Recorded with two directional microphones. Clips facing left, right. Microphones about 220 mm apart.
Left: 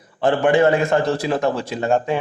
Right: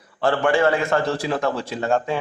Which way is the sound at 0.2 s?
20° left (ahead or behind).